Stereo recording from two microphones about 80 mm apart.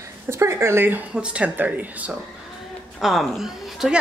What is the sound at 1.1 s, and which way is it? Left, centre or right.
Speech, centre.